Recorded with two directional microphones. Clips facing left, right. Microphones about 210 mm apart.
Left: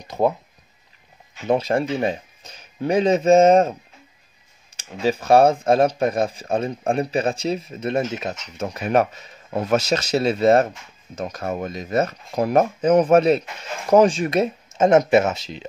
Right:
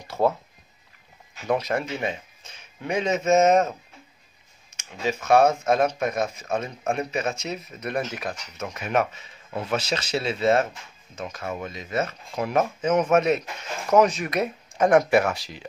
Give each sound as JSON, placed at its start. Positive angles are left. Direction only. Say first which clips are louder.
{"t": 0.0, "sound": "speech", "louder": "left 2 dB", "side_deg": 15}
{"t": 1.4, "sound": "speech", "louder": "left 5 dB", "side_deg": 30}
{"t": 4.7, "sound": "speech", "louder": "left 6 dB", "side_deg": 35}